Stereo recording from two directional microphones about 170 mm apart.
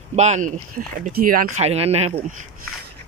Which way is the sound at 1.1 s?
55° right (ahead or behind).